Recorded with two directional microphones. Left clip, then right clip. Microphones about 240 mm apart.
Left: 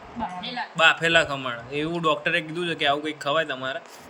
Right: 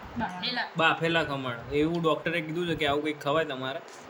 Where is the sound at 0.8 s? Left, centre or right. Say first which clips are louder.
Left 7 dB; centre.